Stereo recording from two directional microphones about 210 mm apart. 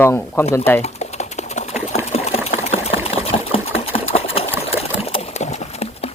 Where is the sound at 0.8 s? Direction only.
30° left (ahead or behind).